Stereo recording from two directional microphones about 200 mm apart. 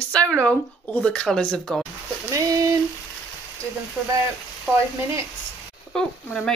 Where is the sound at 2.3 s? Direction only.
15° right (ahead or behind).